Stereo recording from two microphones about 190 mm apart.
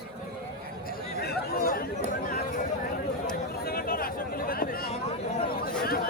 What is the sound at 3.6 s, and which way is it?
Chatter, 50° left (ahead or behind).